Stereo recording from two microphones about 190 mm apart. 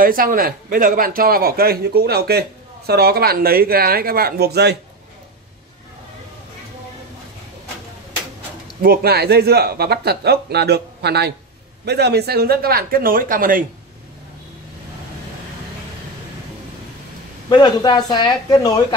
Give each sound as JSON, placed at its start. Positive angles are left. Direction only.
{"t": 0.0, "sound": "a man's voice", "side_deg": -50}
{"t": 8.8, "sound": "a man's voice", "side_deg": -55}
{"t": 17.5, "sound": "speech", "side_deg": 25}